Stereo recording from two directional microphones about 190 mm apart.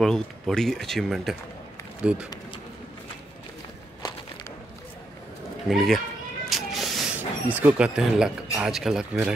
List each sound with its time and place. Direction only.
0.0 s speech: centre (ahead or behind)
4.0 s a sound: 20° left (ahead or behind)
5.7 s speech: centre (ahead or behind)